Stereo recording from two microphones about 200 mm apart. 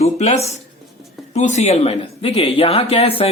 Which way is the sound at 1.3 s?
35° left (ahead or behind).